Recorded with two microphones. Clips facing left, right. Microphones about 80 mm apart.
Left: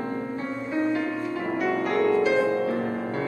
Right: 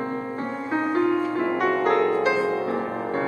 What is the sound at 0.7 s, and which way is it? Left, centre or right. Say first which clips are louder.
Music: right 4 dB; right.